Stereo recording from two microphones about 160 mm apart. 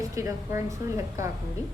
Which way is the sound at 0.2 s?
15° right (ahead or behind).